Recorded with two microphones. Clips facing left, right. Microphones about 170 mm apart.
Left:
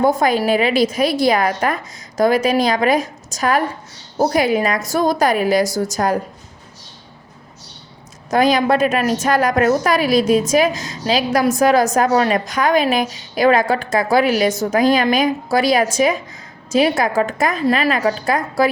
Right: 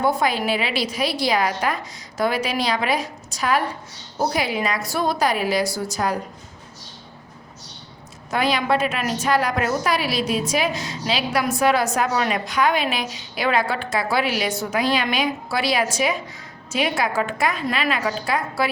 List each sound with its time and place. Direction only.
0.0 s a woman's voice: 45° left (ahead or behind)
8.3 s a woman's voice: 45° left (ahead or behind)